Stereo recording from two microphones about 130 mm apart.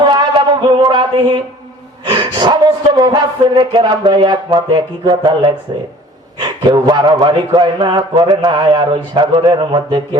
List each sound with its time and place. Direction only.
0.0 s music: 35° right (ahead or behind)
2.0 s a man's voice: 35° right (ahead or behind)